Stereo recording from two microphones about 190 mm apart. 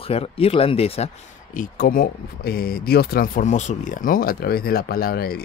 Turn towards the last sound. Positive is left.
turn(degrees=55)  # may be behind; listen again after turning